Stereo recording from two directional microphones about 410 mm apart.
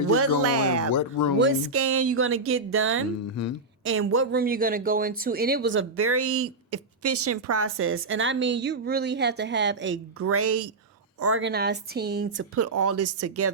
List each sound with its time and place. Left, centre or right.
0.1 s speech: right
0.9 s speech: left
1.4 s speech: right
3.4 s speech: left
3.8 s speech: right
5.6 s speech: right